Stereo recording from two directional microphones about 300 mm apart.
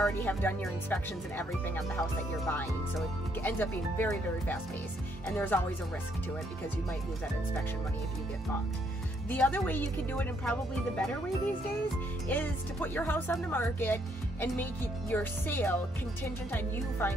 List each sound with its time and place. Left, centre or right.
0.0 s speech: centre
9.3 s speech: centre
12.3 s speech: centre